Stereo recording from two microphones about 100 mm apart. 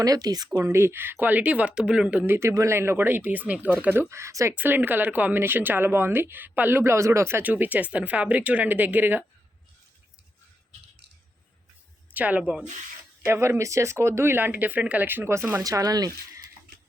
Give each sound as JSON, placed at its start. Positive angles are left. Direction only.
{"t": 0.0, "sound": "speech", "side_deg": -40}
{"t": 0.7, "sound": "speech", "side_deg": -25}
{"t": 4.5, "sound": "speech", "side_deg": -20}
{"t": 12.1, "sound": "speech", "side_deg": -15}
{"t": 13.2, "sound": "speech", "side_deg": -25}
{"t": 15.6, "sound": "speech", "side_deg": -40}